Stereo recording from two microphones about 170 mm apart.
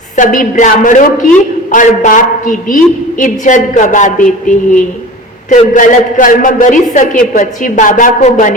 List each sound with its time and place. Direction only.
0.2 s a woman's voice: 50° left (ahead or behind)